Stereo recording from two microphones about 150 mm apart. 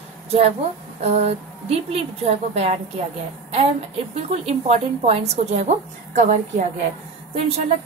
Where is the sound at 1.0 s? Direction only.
45° right (ahead or behind).